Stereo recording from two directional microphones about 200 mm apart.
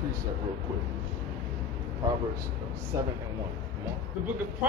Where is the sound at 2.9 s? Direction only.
15° right (ahead or behind).